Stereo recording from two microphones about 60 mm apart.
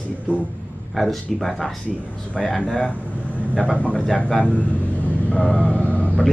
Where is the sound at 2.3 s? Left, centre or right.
Centre.